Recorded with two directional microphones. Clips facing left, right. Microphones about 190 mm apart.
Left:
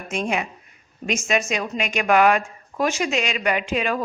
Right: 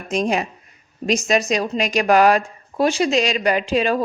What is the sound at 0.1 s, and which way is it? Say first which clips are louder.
A woman's voice: right 5 dB; 35° right (ahead or behind).